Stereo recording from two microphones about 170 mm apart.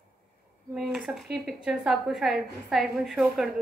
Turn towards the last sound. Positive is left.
turn(degrees=0)  # may be behind; listen again after turning